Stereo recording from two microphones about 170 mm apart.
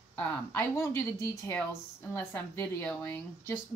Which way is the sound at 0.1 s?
15° left (ahead or behind).